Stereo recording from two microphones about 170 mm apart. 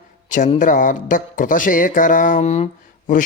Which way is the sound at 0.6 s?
50° left (ahead or behind).